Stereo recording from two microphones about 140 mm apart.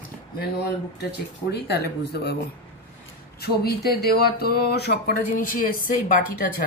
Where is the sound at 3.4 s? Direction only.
90° left.